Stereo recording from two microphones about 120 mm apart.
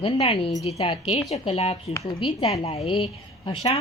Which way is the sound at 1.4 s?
55° left (ahead or behind).